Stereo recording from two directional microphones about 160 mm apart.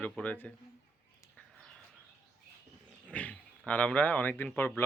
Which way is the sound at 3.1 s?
10° left (ahead or behind).